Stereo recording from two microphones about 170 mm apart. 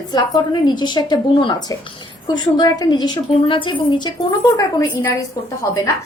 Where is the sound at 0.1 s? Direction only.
25° left (ahead or behind).